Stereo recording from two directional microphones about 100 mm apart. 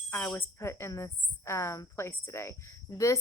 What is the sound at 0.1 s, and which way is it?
A woman's voice, 20° left (ahead or behind).